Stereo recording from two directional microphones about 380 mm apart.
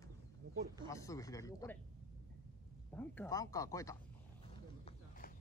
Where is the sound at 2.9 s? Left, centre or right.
Centre.